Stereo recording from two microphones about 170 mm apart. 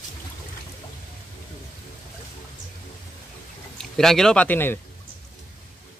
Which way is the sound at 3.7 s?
5° left (ahead or behind).